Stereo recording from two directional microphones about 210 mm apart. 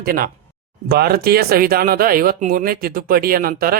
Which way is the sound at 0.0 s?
45° right (ahead or behind).